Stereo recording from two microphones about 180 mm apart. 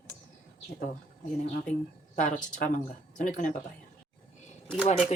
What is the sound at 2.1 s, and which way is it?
Speech, 45° left (ahead or behind).